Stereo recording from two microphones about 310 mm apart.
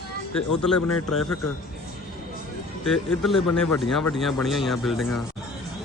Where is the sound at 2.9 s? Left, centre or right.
Centre.